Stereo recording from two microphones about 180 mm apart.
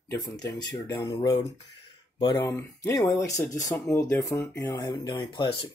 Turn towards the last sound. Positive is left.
turn(degrees=25)  # may be behind; listen again after turning